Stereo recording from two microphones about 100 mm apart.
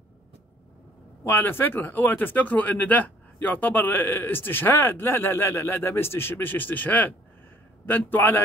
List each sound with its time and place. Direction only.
1.2 s speech: 20° left (ahead or behind)